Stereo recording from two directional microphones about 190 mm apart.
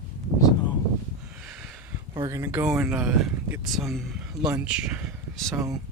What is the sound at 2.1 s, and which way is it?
Speech, 20° right (ahead or behind).